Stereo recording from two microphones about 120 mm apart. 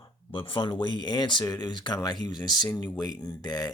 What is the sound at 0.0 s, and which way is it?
Speech, 45° left (ahead or behind).